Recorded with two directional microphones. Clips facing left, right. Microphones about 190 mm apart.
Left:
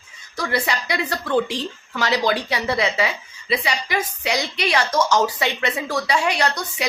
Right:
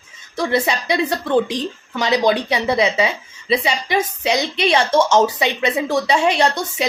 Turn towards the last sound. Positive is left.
turn(degrees=-25)  # may be behind; listen again after turning